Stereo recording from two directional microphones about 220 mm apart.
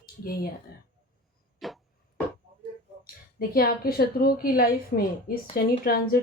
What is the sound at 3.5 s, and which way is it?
A woman's voice, 45° left (ahead or behind).